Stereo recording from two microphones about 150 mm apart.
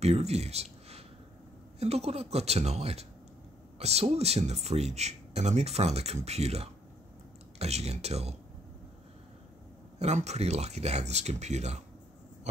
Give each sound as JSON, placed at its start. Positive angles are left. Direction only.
{"t": 0.0, "sound": "speech", "side_deg": -45}
{"t": 9.9, "sound": "speech", "side_deg": -50}